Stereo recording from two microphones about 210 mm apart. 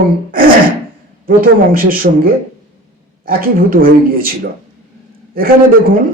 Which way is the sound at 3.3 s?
45° right (ahead or behind).